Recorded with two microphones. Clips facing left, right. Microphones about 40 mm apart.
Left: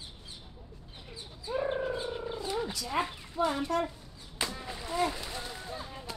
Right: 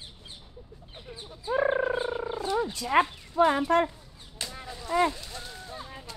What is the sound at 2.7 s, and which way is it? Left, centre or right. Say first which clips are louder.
Speech: right 12 dB; right.